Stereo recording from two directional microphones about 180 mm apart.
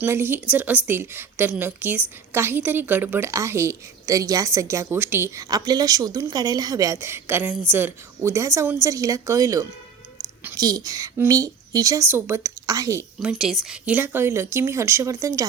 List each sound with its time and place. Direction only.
0.0 s a woman's voice: 10° right (ahead or behind)
13.1 s a woman's voice: centre (ahead or behind); by 15.4 s 20° right (ahead or behind)